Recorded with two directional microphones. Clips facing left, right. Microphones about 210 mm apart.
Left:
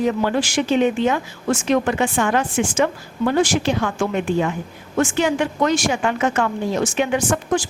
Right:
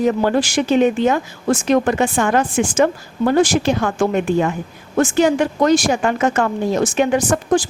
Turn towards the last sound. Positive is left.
turn(degrees=-35)  # may be behind; listen again after turning